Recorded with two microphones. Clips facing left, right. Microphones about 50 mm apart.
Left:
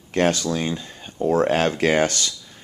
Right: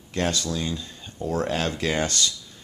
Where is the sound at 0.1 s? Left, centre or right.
Left.